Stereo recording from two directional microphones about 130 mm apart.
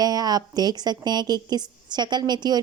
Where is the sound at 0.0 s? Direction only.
30° right (ahead or behind).